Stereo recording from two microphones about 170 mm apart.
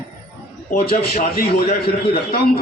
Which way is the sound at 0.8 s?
65° left (ahead or behind).